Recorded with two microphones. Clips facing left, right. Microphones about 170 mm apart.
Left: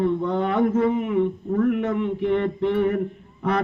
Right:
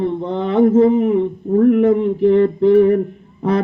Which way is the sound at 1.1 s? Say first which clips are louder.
Right 6 dB; 35° right (ahead or behind).